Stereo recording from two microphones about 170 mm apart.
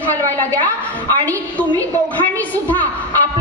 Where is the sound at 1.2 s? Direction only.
10° left (ahead or behind).